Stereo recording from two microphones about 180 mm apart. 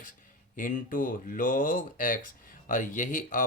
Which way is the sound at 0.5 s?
50° left (ahead or behind).